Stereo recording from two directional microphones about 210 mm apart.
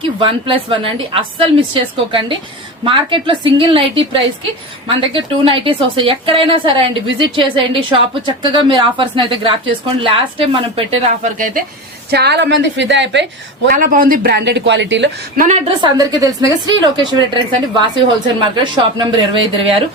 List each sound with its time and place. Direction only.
0.2 s a woman's voice: 25° right (ahead or behind)
12.1 s a woman's voice: 50° right (ahead or behind)
13.7 s speech: 40° right (ahead or behind); by 15.1 s 60° right (ahead or behind)
15.4 s a woman's voice: 35° right (ahead or behind)
15.8 s a woman's voice: 15° right (ahead or behind)